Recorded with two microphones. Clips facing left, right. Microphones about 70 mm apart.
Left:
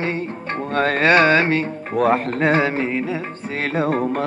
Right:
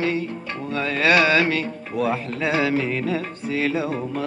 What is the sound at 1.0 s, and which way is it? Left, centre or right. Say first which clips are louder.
Speech: left 2 dB; left.